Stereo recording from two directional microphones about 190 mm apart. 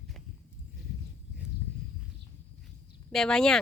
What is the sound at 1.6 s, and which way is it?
Horse, 15° left (ahead or behind).